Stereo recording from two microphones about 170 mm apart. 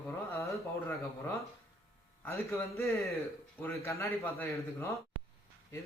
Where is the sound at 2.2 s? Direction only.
15° left (ahead or behind).